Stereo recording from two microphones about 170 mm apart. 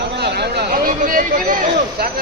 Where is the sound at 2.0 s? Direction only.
70° right (ahead or behind).